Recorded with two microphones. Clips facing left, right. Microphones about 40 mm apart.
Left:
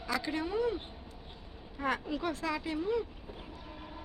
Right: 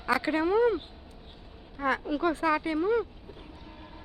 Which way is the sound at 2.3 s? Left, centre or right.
Centre.